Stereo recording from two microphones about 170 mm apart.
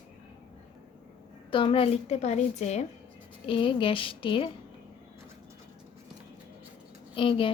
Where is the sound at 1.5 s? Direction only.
30° left (ahead or behind).